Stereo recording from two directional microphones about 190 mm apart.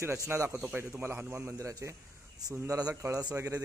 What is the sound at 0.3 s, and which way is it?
A man's voice, 15° right (ahead or behind).